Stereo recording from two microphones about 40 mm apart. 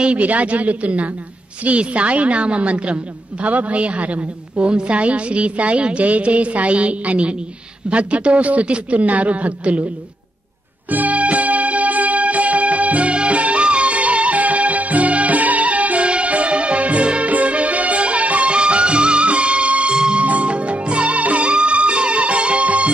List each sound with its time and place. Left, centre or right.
0.0 s a woman's voice: right
10.9 s music: right